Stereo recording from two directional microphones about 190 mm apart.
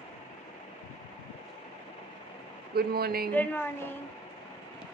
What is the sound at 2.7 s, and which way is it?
Speech, 55° right (ahead or behind).